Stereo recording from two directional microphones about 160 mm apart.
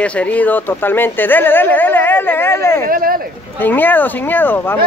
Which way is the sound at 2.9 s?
65° right (ahead or behind).